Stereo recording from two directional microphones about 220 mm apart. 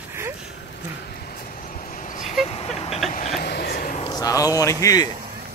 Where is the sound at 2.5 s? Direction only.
30° left (ahead or behind).